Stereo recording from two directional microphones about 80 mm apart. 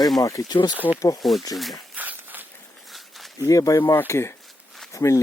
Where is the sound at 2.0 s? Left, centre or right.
Right.